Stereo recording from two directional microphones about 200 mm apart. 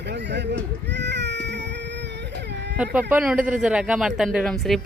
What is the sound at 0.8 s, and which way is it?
Baby cry, 60° right (ahead or behind).